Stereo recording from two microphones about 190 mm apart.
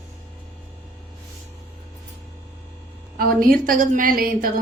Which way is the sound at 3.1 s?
50° right (ahead or behind).